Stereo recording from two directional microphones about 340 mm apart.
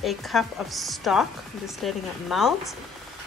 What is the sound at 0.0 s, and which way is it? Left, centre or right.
Speech, centre.